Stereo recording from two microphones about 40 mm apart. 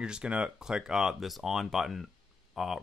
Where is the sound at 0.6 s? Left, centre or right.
Centre.